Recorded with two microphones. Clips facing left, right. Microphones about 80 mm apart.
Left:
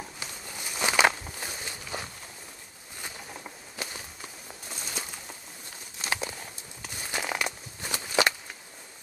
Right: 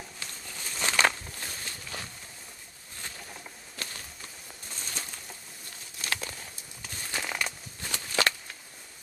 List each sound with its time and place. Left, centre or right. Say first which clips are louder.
0.2 s walk: left 2 dB; centre
3.7 s walk: left 3 dB; centre
5.9 s a sound: left 3 dB; centre